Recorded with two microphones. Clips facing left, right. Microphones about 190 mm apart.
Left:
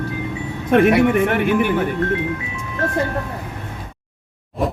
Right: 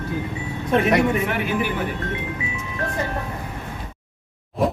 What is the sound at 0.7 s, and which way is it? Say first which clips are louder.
Speech: left 5 dB; 60° left (ahead or behind).